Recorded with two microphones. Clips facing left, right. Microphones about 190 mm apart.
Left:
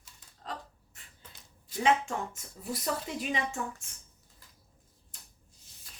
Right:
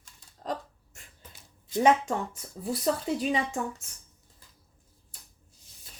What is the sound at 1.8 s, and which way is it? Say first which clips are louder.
Speech: right 4 dB; 35° right (ahead or behind).